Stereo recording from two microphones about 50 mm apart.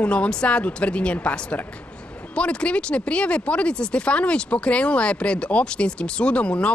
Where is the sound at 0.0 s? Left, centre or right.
Left.